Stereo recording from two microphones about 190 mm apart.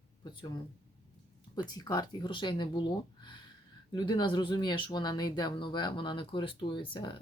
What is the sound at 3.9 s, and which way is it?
Speech, 20° left (ahead or behind).